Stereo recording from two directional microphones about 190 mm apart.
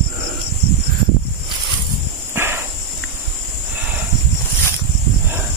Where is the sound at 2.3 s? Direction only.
10° right (ahead or behind).